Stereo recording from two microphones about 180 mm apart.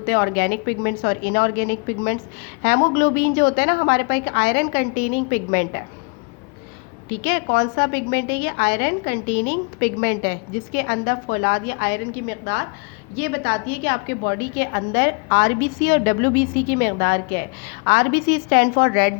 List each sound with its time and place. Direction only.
0.0 s a woman's voice: 55° left (ahead or behind)
7.1 s a woman's voice: 60° left (ahead or behind)